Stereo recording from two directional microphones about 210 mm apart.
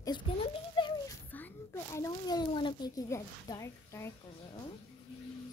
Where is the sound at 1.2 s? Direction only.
10° left (ahead or behind).